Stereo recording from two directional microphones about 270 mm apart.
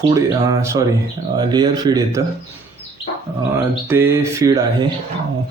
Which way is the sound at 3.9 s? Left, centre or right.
Centre.